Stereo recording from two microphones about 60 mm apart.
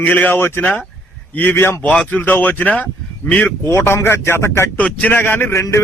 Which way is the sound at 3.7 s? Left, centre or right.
Left.